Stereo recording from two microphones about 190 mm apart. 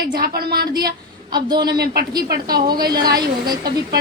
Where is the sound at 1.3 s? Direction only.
20° right (ahead or behind).